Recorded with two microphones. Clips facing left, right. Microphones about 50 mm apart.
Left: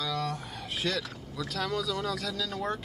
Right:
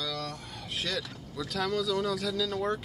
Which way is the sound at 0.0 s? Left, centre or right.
Centre.